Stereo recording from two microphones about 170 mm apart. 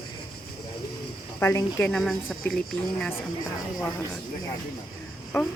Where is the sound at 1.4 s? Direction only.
15° left (ahead or behind).